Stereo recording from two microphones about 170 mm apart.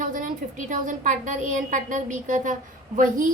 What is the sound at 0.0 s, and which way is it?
A woman's voice, 50° right (ahead or behind).